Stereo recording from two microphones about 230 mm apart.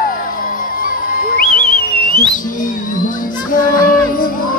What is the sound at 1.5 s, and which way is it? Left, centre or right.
Whistle, left.